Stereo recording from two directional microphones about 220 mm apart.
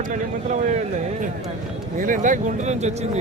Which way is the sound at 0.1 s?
35° right (ahead or behind).